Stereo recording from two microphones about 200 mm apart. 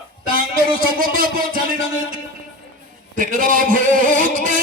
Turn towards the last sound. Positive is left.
turn(degrees=-45)  # may be behind; listen again after turning